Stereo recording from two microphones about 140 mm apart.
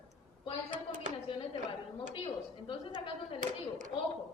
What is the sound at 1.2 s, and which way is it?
A woman's voice, 40° left (ahead or behind).